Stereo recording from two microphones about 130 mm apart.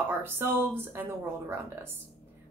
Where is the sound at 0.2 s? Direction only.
15° right (ahead or behind).